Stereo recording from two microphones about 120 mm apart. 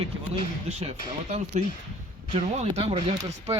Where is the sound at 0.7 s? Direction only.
65° right (ahead or behind).